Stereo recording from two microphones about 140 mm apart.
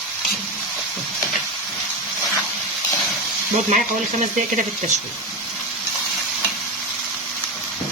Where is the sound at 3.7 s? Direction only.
65° right (ahead or behind).